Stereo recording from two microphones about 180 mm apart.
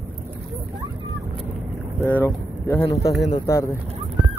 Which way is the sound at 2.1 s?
10° left (ahead or behind).